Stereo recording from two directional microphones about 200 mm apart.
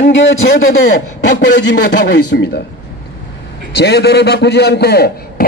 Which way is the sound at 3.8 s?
55° left (ahead or behind).